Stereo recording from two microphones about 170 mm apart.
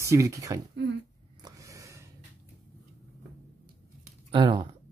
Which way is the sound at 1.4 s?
20° right (ahead or behind).